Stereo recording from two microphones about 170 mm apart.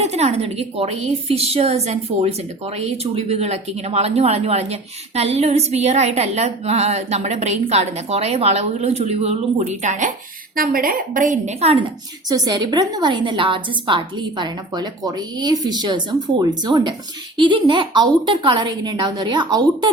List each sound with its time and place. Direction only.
0.0 s a woman's voice: 40° right (ahead or behind)
10.5 s a woman's voice: 60° right (ahead or behind); by 11.9 s 35° right (ahead or behind)
12.3 s a woman's voice: 25° right (ahead or behind)